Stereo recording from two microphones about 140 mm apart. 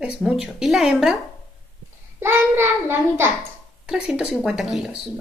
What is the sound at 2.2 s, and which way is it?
A child's voice, 15° right (ahead or behind).